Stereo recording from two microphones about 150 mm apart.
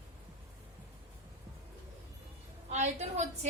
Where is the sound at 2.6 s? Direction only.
50° right (ahead or behind).